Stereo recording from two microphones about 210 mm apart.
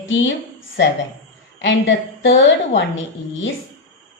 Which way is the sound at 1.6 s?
60° left (ahead or behind).